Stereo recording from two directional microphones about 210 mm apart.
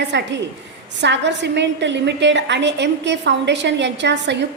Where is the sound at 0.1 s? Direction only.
60° right (ahead or behind).